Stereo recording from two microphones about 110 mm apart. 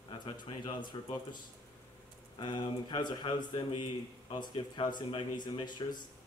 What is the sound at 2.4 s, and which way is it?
Speech, 45° left (ahead or behind).